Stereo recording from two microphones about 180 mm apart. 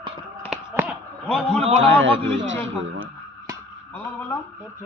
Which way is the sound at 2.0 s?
90° right.